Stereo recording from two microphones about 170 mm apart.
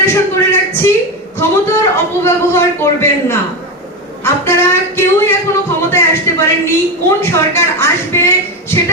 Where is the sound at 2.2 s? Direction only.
15° left (ahead or behind).